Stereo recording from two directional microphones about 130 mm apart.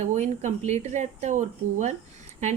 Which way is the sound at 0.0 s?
65° right (ahead or behind).